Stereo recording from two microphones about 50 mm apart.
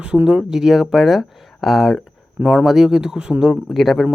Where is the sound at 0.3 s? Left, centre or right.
Centre.